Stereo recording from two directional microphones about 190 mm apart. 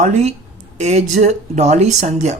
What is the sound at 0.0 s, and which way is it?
Speech, 35° right (ahead or behind).